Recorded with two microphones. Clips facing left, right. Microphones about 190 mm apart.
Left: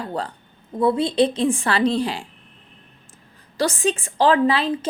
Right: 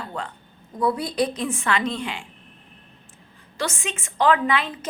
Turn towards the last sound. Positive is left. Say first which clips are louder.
# left 5 dB
turn(degrees=30)  # may be behind; listen again after turning